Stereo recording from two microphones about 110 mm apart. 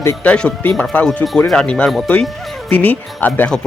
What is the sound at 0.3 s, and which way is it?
Speech, 10° left (ahead or behind).